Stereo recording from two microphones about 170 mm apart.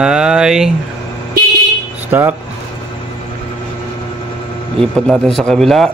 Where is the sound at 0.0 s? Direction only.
5° right (ahead or behind).